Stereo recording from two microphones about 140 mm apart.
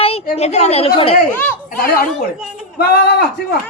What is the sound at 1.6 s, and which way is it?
Speech, 90° left.